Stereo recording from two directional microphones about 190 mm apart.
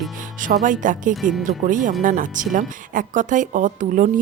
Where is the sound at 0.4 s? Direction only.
45° right (ahead or behind).